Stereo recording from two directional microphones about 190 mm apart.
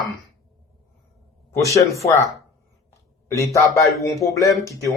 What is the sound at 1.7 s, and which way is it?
Speech, 15° left (ahead or behind).